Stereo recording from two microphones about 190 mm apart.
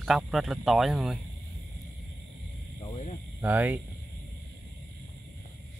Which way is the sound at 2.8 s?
35° left (ahead or behind).